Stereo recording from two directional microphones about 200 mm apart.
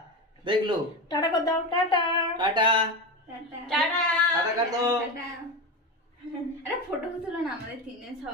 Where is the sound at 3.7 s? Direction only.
5° left (ahead or behind).